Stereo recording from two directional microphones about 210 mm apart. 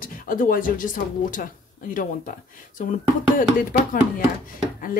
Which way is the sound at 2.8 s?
35° left (ahead or behind).